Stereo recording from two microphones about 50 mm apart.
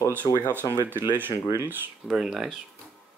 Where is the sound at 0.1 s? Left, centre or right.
Right.